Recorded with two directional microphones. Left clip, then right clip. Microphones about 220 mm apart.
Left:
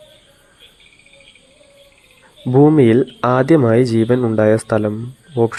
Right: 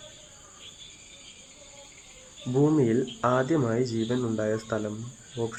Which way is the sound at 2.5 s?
35° left (ahead or behind).